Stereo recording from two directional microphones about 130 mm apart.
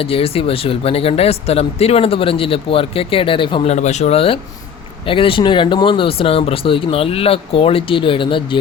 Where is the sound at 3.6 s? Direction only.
60° left (ahead or behind).